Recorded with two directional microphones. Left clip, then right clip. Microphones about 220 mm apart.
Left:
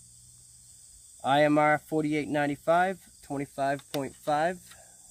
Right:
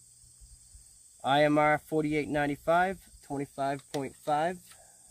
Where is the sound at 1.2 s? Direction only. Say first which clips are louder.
Left 2 dB; 15° right (ahead or behind).